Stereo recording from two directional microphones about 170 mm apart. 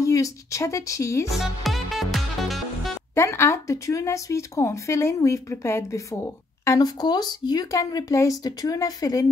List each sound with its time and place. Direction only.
0.0 s speech: 20° left (ahead or behind)
1.3 s music: centre (ahead or behind)
3.2 s speech: 15° left (ahead or behind)